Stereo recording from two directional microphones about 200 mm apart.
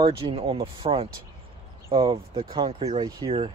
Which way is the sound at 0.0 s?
25° right (ahead or behind).